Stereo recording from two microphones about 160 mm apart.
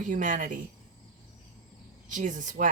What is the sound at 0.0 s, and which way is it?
Speech, 55° right (ahead or behind).